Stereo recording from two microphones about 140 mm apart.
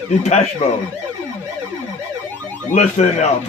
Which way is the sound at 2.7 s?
55° left (ahead or behind).